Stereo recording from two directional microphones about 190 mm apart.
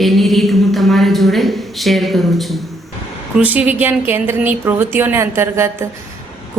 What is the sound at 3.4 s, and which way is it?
A woman's voice, 10° right (ahead or behind).